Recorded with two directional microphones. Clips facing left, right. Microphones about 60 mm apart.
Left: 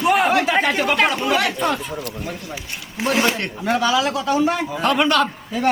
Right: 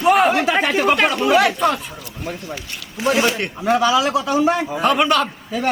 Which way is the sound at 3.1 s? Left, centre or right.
Left.